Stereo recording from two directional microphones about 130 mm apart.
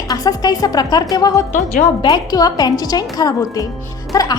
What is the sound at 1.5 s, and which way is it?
Speech, 90° left.